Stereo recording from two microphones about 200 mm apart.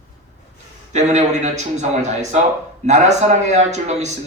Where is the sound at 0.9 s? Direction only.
35° right (ahead or behind).